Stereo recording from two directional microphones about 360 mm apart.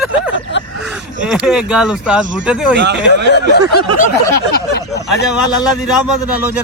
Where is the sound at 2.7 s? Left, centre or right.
Right.